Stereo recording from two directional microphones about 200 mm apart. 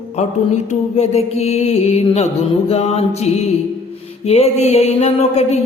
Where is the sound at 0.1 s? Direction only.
35° left (ahead or behind).